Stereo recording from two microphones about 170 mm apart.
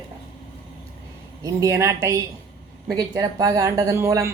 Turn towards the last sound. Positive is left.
turn(degrees=-15)  # may be behind; listen again after turning